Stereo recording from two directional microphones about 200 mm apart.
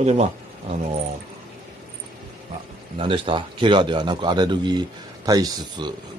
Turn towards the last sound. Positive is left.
turn(degrees=-20)  # may be behind; listen again after turning